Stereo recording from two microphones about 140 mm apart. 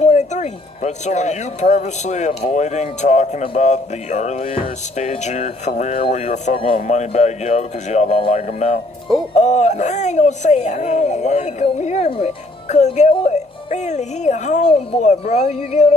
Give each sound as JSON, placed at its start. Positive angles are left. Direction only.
{"t": 0.0, "sound": "speech", "side_deg": 55}
{"t": 6.9, "sound": "speech", "side_deg": 55}